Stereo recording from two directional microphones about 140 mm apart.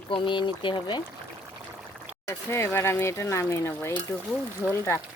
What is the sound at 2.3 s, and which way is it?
Speech, 20° left (ahead or behind).